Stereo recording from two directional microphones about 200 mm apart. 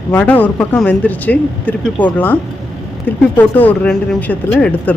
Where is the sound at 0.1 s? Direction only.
10° left (ahead or behind).